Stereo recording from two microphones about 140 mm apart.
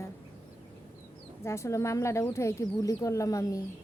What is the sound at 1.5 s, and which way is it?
A woman's voice, 20° left (ahead or behind).